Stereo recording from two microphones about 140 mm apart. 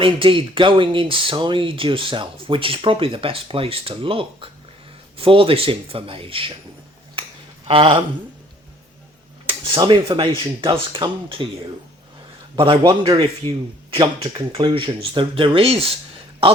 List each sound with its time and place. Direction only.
0.0 s speech: 40° right (ahead or behind)
7.7 s speech: 35° right (ahead or behind)
9.6 s speech: 35° right (ahead or behind)
12.5 s speech: 40° right (ahead or behind)
13.4 s speech: 15° left (ahead or behind)
13.9 s speech: 40° right (ahead or behind)